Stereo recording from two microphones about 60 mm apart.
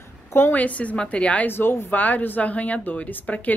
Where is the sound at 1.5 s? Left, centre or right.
Left.